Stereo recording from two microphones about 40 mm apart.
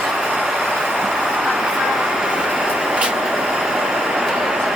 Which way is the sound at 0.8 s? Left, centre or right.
Centre.